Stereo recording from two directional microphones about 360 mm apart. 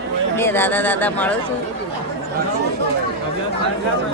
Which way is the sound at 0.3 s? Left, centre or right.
Centre.